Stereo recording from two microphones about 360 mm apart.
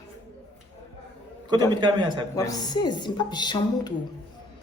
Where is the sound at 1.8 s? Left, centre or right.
Centre.